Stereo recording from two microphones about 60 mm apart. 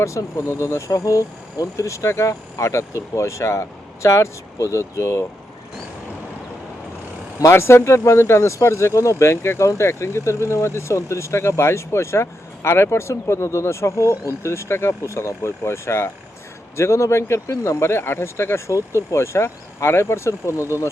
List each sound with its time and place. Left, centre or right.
0.0 s speech: left
7.5 s speech: left